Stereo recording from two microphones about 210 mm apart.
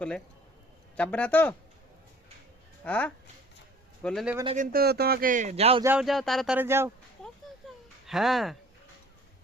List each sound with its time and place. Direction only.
0.9 s speech: 5° left (ahead or behind)
2.8 s speech: 5° left (ahead or behind)
4.4 s a man's voice: 35° right (ahead or behind)
5.8 s speech: 5° right (ahead or behind)
8.0 s speech: centre (ahead or behind)